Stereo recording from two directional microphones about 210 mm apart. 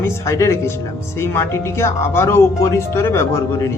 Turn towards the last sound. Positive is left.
turn(degrees=15)  # may be behind; listen again after turning